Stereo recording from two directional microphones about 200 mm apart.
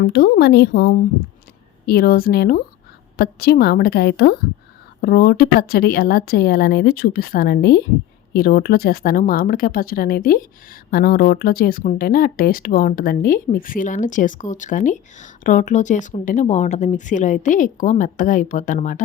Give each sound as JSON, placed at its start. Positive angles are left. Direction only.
{"t": 0.0, "sound": "a woman's voice", "side_deg": 55}